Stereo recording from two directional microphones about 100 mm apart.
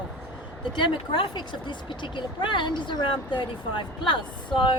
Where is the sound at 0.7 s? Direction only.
50° left (ahead or behind).